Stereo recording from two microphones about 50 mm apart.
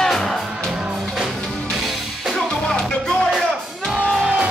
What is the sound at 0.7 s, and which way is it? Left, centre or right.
Music, centre.